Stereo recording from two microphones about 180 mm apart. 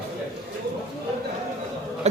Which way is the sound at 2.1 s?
40° right (ahead or behind).